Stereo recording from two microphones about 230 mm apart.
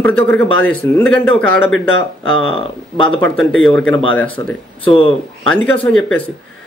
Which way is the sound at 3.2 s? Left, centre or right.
Centre.